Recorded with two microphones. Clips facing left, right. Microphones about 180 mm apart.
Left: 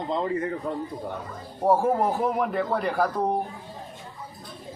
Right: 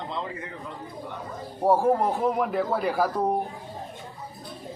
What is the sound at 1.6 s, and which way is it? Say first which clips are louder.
A man's voice: even; centre (ahead or behind).